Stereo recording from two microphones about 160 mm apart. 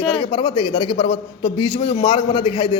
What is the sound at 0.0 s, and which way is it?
A man's voice, 30° left (ahead or behind).